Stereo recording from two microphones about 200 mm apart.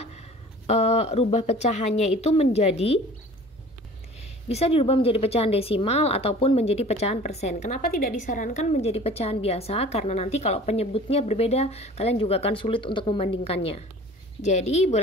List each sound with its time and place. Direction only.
0.7 s speech: 35° left (ahead or behind)
4.5 s speech: 30° left (ahead or behind)